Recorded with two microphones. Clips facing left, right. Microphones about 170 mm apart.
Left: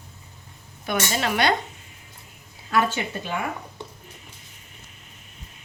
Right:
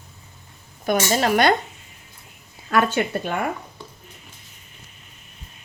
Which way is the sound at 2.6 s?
55° right (ahead or behind).